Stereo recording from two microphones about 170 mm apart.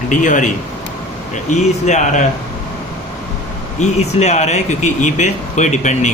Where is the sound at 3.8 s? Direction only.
40° left (ahead or behind).